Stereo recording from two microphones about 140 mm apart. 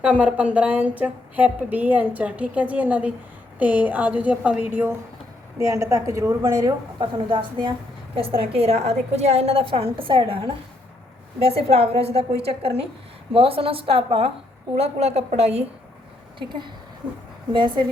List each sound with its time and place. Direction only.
0.0 s a woman's voice: 10° right (ahead or behind); by 15.6 s 50° right (ahead or behind)
16.4 s a woman's voice: 35° right (ahead or behind)